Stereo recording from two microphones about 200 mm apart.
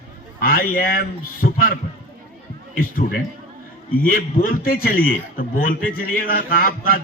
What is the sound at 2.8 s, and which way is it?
A man's voice, 45° left (ahead or behind).